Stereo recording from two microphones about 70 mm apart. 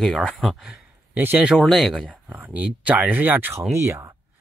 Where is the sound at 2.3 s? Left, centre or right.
Right.